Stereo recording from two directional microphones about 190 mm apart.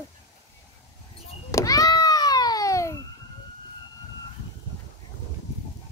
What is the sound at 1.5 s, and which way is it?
Cat, 15° left (ahead or behind).